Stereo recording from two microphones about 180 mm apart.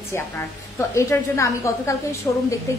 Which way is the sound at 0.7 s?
15° left (ahead or behind).